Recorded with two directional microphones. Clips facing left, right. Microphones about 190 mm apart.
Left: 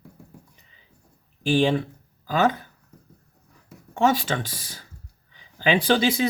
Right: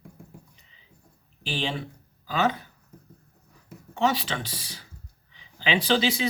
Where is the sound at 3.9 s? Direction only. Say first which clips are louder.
Left 4 dB; 50° left (ahead or behind).